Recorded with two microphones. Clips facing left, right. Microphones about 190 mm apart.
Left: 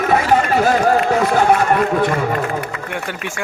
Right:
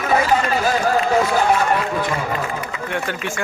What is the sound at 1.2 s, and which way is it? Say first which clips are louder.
Snicker: left 3 dB; 55° left (ahead or behind).